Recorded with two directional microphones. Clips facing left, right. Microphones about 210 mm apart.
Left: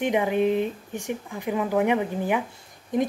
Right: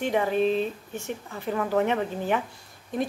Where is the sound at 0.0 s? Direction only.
15° left (ahead or behind).